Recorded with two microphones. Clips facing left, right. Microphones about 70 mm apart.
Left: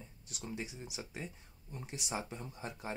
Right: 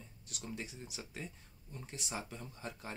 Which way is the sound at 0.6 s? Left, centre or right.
Centre.